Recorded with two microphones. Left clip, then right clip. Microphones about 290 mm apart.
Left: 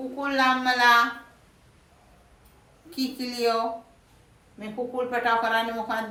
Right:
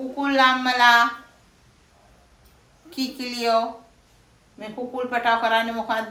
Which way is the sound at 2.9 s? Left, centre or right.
Centre.